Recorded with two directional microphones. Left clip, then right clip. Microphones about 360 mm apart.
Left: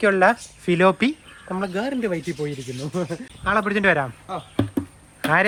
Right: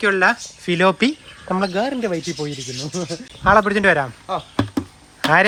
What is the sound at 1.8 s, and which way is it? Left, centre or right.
Speech, centre.